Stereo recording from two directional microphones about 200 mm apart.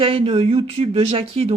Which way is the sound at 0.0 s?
25° right (ahead or behind).